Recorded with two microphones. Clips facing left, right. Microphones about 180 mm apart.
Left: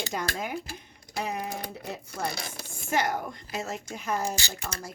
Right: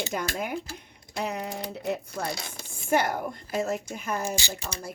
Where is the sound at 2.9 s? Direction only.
55° right (ahead or behind).